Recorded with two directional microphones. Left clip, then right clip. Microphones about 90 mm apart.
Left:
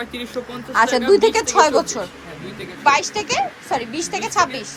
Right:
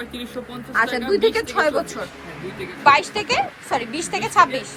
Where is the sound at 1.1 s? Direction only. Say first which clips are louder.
Left 5 dB; 35° left (ahead or behind).